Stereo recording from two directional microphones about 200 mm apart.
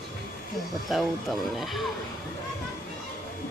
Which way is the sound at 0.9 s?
Centre (ahead or behind).